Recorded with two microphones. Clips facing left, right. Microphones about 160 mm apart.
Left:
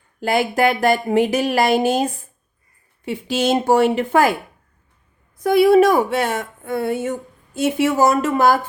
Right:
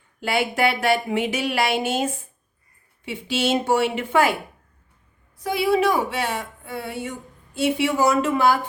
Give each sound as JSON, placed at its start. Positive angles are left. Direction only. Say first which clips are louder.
{"t": 0.2, "sound": "speech", "louder": "left 4 dB", "side_deg": 40}
{"t": 5.4, "sound": "speech", "louder": "left 8 dB", "side_deg": 50}